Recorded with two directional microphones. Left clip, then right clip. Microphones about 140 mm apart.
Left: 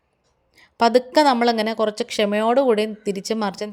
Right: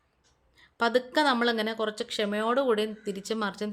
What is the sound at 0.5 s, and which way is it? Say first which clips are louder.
A woman's voice: left 9 dB; 45° left (ahead or behind).